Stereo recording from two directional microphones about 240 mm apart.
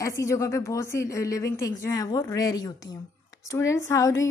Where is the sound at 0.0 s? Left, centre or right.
Centre.